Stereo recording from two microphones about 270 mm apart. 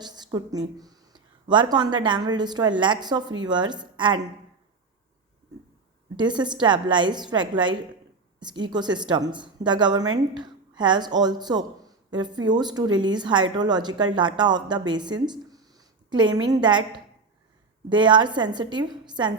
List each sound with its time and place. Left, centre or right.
0.0 s speech: centre
6.1 s a woman's voice: centre
17.8 s speech: centre